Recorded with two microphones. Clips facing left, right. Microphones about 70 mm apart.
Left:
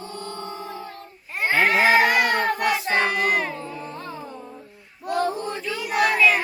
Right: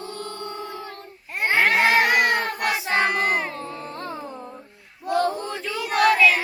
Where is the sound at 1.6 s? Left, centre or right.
Right.